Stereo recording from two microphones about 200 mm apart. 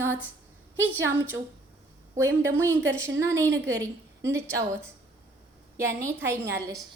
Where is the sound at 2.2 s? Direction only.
15° right (ahead or behind).